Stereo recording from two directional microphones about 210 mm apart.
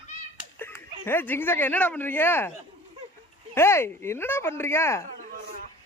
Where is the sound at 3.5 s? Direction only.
10° left (ahead or behind).